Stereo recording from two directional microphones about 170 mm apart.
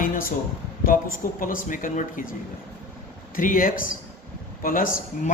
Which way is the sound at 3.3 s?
55° left (ahead or behind).